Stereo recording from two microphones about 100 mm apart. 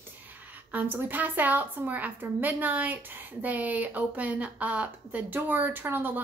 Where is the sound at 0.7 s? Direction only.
20° right (ahead or behind).